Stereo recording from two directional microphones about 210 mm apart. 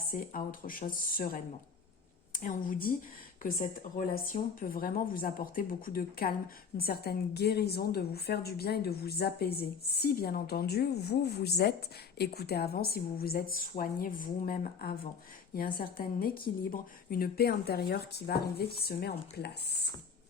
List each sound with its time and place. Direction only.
0.1 s a woman's voice: 45° left (ahead or behind)
3.9 s a woman's voice: 45° left (ahead or behind)